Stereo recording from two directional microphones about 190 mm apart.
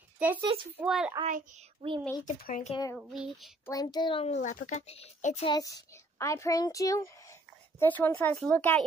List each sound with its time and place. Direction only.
0.4 s a child's voice: 25° right (ahead or behind)
0.7 s a child's voice: 5° right (ahead or behind)
1.8 s a child's voice: 25° right (ahead or behind)
2.2 s speech: 40° left (ahead or behind)
2.7 s a child's voice: 20° left (ahead or behind)
3.0 s a child's voice: centre (ahead or behind)
3.6 s a child's voice: 20° left (ahead or behind); by 5.5 s 35° left (ahead or behind)
5.5 s a child's voice: 20° left (ahead or behind)